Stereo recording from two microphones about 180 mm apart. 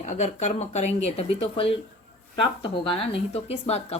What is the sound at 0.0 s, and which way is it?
Speech, 40° left (ahead or behind).